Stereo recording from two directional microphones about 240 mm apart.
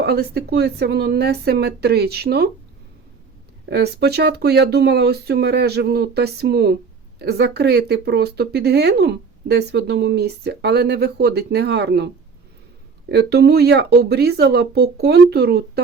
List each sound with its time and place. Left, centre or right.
0.0 s speech: right
3.7 s speech: right
13.1 s speech: right